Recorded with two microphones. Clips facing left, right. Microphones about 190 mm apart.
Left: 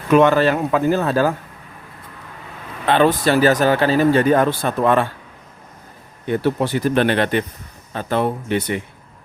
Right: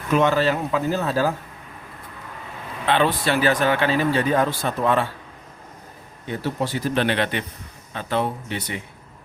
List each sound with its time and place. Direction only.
0.1 s speech: 55° left (ahead or behind)
2.8 s speech: 45° left (ahead or behind)
6.2 s speech: 60° left (ahead or behind)